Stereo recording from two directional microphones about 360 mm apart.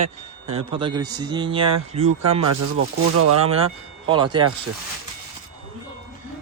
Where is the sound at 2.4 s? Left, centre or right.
Right.